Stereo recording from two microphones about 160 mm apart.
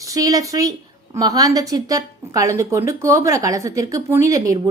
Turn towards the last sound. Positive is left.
turn(degrees=-20)  # may be behind; listen again after turning